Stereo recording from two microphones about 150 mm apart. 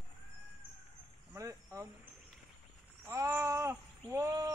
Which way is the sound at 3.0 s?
15° right (ahead or behind).